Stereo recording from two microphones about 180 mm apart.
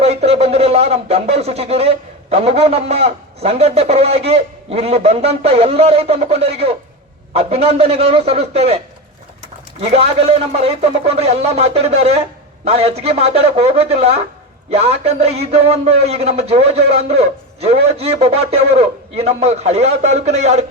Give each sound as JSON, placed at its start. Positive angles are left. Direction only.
{"t": 0.0, "sound": "speech", "side_deg": -35}
{"t": 9.9, "sound": "speech", "side_deg": -35}